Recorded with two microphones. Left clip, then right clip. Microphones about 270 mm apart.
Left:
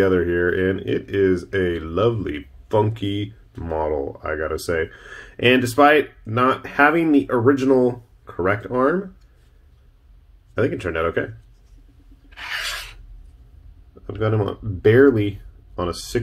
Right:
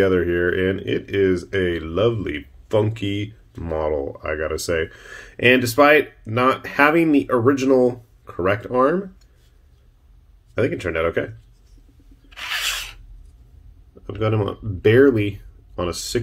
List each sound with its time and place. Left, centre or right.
0.0 s speech: centre
10.5 s speech: centre
12.3 s rub: right
14.0 s speech: centre